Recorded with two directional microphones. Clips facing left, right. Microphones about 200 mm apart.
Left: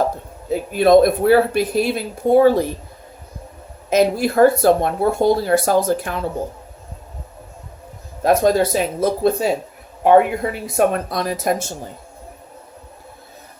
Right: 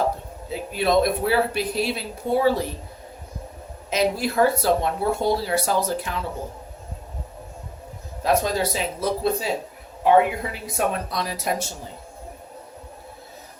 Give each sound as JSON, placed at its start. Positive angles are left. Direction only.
{"t": 0.5, "sound": "speech", "side_deg": 50}
{"t": 3.8, "sound": "speech", "side_deg": 50}
{"t": 8.2, "sound": "speech", "side_deg": 50}